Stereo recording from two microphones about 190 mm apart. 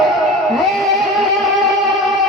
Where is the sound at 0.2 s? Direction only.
Centre (ahead or behind).